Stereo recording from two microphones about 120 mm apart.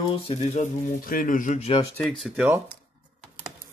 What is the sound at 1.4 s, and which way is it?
Speech, 90° left.